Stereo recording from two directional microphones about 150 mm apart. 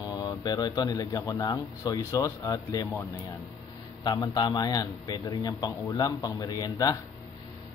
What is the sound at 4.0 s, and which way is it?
Speech, 25° left (ahead or behind).